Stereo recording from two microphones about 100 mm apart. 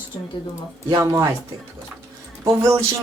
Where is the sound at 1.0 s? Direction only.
30° right (ahead or behind).